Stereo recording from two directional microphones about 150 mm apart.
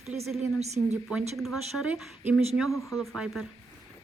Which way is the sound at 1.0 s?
5° right (ahead or behind).